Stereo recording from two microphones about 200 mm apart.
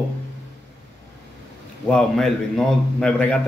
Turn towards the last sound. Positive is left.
turn(degrees=5)  # may be behind; listen again after turning